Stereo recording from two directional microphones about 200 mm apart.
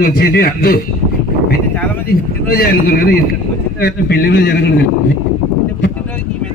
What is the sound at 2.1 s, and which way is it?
A man's voice, 50° left (ahead or behind).